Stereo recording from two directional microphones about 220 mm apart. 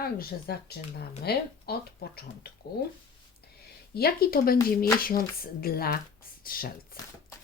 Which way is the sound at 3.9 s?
45° left (ahead or behind).